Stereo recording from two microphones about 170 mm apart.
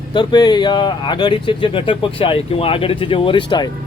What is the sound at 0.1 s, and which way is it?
Speech, 25° left (ahead or behind).